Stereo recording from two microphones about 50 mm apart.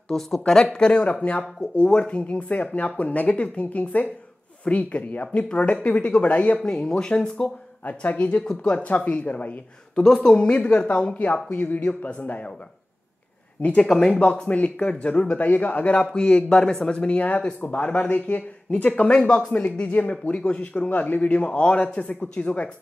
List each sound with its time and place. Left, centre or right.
0.1 s speech: centre; by 6.6 s left
6.6 s speech: centre
7.8 s speech: left
10.0 s a man's voice: centre; by 12.5 s left
13.6 s speech: left
19.1 s speech: centre
19.5 s speech: left